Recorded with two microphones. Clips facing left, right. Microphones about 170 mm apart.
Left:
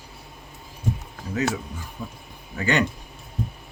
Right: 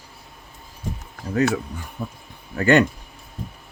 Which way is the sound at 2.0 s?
55° right (ahead or behind).